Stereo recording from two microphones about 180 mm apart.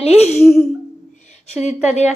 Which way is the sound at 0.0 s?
35° left (ahead or behind).